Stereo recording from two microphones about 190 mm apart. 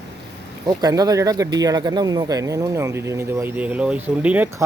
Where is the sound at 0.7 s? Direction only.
20° right (ahead or behind).